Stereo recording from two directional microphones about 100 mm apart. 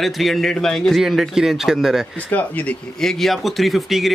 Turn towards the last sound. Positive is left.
turn(degrees=0)  # may be behind; listen again after turning